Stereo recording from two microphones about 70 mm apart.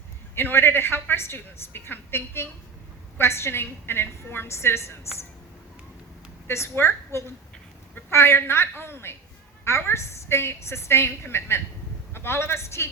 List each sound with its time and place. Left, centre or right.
0.3 s a woman's voice: left
6.5 s a woman's voice: left